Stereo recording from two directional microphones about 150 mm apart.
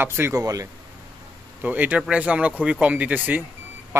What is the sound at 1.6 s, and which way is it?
Speech, 10° right (ahead or behind).